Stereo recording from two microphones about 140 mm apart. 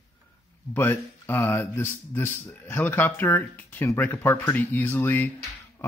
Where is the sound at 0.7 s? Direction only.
15° left (ahead or behind).